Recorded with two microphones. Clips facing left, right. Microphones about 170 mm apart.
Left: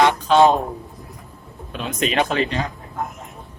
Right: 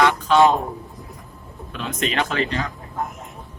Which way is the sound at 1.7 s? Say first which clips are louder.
Left 3 dB; 20° left (ahead or behind).